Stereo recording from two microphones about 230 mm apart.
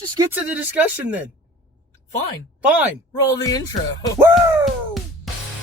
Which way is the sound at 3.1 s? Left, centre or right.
Centre.